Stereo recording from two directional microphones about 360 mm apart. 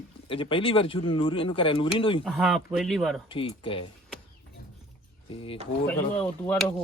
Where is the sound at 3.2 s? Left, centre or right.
Centre.